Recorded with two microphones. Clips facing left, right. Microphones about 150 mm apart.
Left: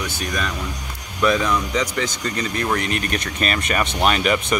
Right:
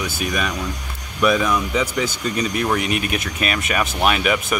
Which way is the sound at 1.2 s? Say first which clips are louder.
Right 1 dB; 5° right (ahead or behind).